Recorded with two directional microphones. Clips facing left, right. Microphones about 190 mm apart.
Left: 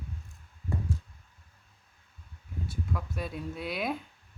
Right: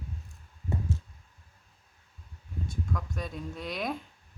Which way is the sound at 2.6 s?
5° left (ahead or behind).